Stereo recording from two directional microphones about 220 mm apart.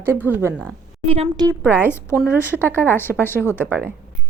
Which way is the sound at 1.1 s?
20° right (ahead or behind).